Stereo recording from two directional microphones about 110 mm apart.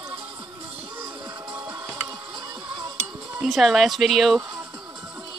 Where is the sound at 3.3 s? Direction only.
Centre (ahead or behind).